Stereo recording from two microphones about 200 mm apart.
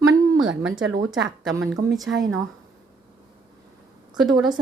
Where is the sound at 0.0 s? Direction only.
80° right.